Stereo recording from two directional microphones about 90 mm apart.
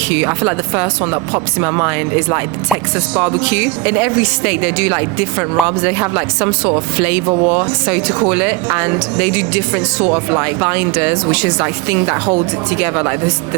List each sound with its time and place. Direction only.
0.1 s speech: 25° right (ahead or behind)
3.4 s speech: 20° right (ahead or behind)